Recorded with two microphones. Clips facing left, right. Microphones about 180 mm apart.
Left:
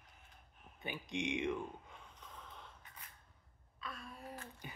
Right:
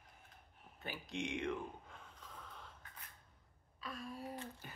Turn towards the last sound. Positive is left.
turn(degrees=-25)  # may be behind; listen again after turning